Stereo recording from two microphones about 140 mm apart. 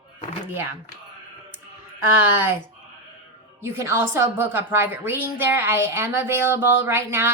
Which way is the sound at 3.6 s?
20° right (ahead or behind).